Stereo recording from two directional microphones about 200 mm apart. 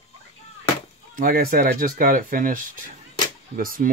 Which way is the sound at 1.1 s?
45° right (ahead or behind).